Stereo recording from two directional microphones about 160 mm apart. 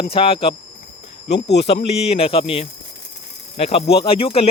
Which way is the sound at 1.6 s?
40° left (ahead or behind).